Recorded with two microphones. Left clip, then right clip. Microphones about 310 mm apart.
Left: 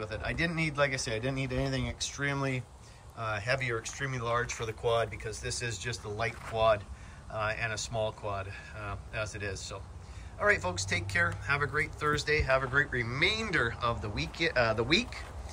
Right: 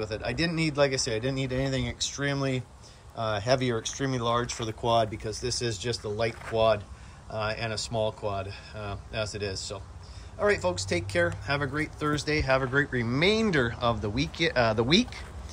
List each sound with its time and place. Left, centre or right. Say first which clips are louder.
0.0 s speech: right 3 dB; centre